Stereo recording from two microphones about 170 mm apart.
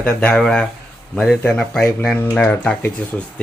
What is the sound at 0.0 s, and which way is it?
Speech, 5° left (ahead or behind).